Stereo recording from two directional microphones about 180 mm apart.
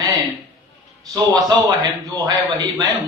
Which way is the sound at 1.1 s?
20° right (ahead or behind).